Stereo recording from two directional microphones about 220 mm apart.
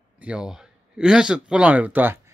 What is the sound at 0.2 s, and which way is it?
A man's voice, 5° right (ahead or behind).